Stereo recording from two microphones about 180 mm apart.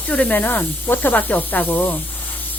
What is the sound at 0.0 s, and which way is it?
Speech, 10° left (ahead or behind).